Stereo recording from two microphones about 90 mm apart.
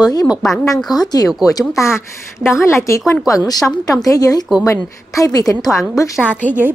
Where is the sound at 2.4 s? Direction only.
30° left (ahead or behind).